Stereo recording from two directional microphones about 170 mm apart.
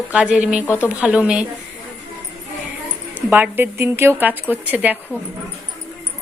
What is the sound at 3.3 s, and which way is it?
A woman's voice, 10° right (ahead or behind).